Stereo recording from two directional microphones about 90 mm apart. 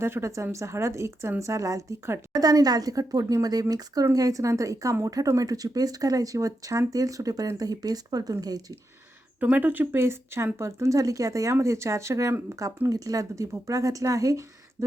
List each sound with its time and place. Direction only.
0.0 s a woman's voice: 30° right (ahead or behind)
9.4 s speech: 15° right (ahead or behind); by 14.8 s 35° right (ahead or behind)